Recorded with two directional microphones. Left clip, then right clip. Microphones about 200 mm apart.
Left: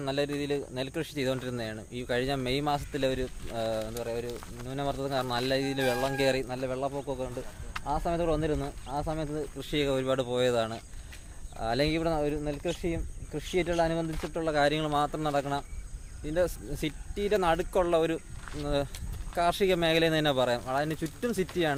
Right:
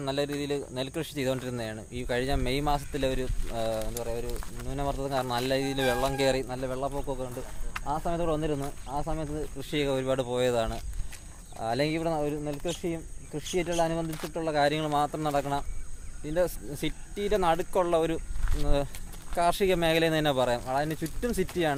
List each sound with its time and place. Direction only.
0.0 s speech: centre (ahead or behind)
14.1 s speech: 45° right (ahead or behind)
14.3 s speech: 5° left (ahead or behind)